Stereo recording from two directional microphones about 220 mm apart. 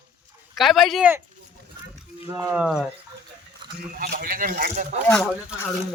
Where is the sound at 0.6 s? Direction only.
Centre (ahead or behind).